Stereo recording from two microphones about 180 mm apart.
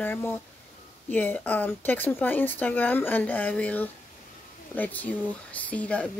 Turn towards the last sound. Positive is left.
turn(degrees=10)  # may be behind; listen again after turning